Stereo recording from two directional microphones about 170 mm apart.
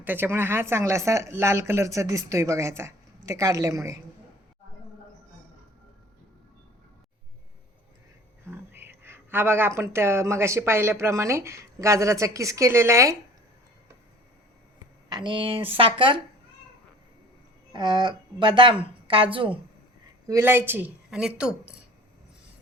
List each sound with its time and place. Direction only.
0.0 s speech: 10° right (ahead or behind)
8.4 s speech: 10° right (ahead or behind)
15.1 s a woman's voice: 30° right (ahead or behind)
17.7 s a woman's voice: 25° right (ahead or behind)
20.2 s speech: 15° right (ahead or behind)